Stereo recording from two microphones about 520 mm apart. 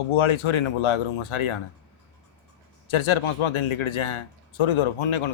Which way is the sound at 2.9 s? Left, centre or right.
Left.